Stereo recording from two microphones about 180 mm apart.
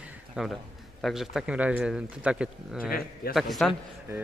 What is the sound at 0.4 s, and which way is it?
Speech, 5° right (ahead or behind).